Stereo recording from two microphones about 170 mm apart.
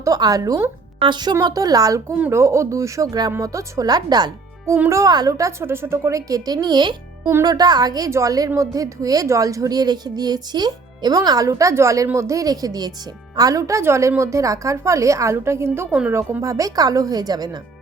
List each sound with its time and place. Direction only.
0.0 s a woman's voice: 20° right (ahead or behind)